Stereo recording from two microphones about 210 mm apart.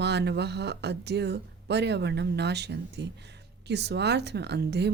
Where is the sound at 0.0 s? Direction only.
55° right (ahead or behind).